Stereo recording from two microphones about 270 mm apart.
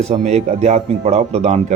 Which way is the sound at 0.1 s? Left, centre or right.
Right.